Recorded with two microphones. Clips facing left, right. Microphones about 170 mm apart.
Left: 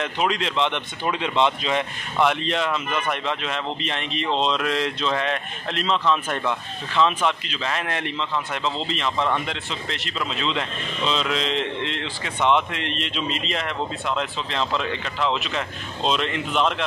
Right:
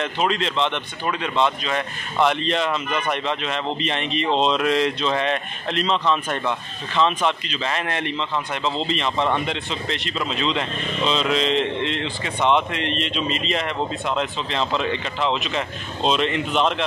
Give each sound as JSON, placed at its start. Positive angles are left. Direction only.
{"t": 0.0, "sound": "speech", "side_deg": 10}
{"t": 2.2, "sound": "speech", "side_deg": 5}